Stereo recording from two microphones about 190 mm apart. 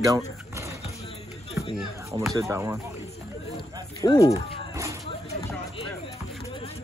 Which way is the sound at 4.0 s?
15° left (ahead or behind).